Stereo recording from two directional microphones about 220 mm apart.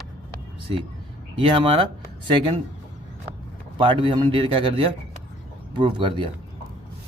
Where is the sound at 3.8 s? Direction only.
20° right (ahead or behind).